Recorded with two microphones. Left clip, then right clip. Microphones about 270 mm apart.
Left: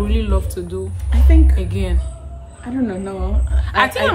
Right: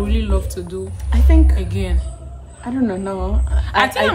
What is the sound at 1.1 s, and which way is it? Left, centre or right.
Speech, centre.